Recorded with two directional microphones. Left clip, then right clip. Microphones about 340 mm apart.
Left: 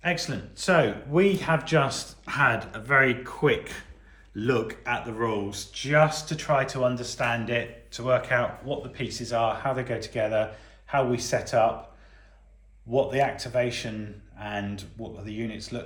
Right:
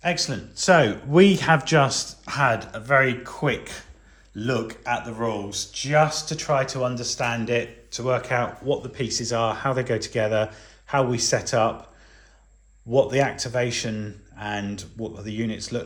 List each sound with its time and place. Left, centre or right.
0.0 s speech: centre
12.9 s speech: right